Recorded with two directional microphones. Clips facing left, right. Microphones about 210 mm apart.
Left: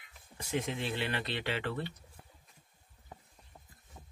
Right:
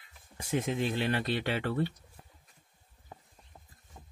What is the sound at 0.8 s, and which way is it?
Speech, 45° right (ahead or behind).